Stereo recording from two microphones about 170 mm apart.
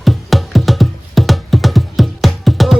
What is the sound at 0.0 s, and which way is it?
Music, centre (ahead or behind).